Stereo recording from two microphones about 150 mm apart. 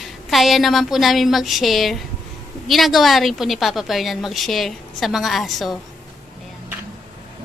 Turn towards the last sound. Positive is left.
turn(degrees=0)  # may be behind; listen again after turning